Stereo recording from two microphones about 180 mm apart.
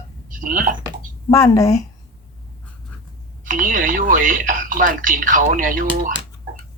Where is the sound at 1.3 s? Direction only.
15° left (ahead or behind).